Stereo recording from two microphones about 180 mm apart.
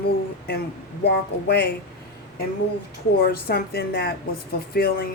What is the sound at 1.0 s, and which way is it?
Speech, 65° left (ahead or behind).